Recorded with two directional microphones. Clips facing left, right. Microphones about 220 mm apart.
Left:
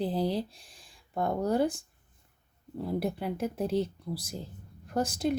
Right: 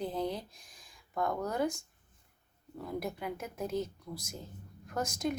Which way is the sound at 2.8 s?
30° left (ahead or behind).